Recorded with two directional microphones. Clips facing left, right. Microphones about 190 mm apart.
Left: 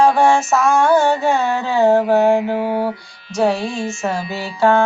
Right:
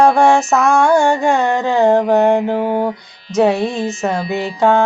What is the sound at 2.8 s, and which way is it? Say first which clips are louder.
Music: right 2 dB; 20° right (ahead or behind).